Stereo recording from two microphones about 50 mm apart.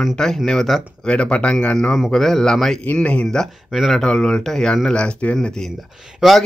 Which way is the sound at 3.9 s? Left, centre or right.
Centre.